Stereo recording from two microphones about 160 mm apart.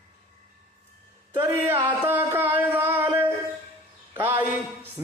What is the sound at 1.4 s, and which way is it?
Music, 15° right (ahead or behind).